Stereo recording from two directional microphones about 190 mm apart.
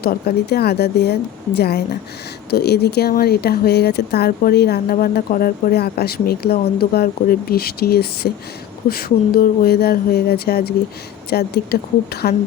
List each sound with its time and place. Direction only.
0.0 s speech: 55° left (ahead or behind)
8.9 s a sound: 50° left (ahead or behind)
11.3 s speech: 55° left (ahead or behind)